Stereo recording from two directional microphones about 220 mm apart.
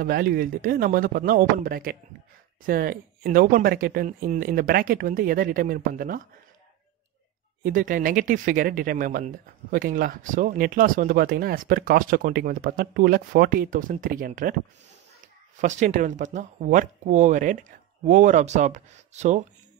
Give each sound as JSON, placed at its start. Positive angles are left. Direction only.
{"t": 0.0, "sound": "speech", "side_deg": -40}
{"t": 7.6, "sound": "speech", "side_deg": -40}
{"t": 15.5, "sound": "speech", "side_deg": -35}